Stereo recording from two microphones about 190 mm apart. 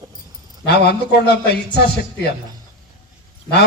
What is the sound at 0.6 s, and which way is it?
A man's voice, 60° left (ahead or behind).